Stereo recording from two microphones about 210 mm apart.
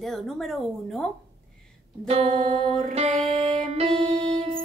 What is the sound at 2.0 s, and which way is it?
Music, 30° right (ahead or behind).